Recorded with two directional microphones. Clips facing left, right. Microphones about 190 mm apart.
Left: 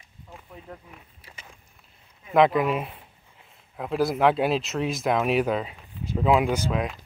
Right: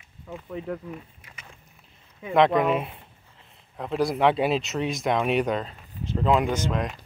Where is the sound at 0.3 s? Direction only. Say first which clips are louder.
Right 9 dB; 70° right (ahead or behind).